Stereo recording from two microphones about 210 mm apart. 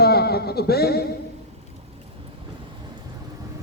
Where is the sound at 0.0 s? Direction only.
50° left (ahead or behind).